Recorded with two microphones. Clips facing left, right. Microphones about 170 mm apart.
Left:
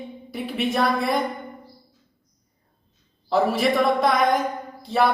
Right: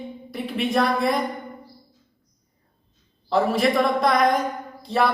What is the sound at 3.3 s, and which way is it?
Speech, centre (ahead or behind).